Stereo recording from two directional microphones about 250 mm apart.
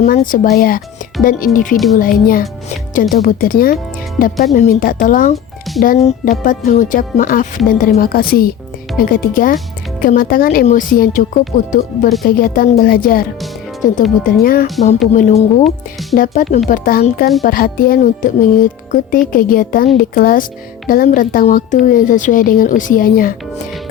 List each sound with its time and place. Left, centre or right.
0.0 s speech: left
14.3 s speech: left
15.6 s speech: centre
16.1 s speech: left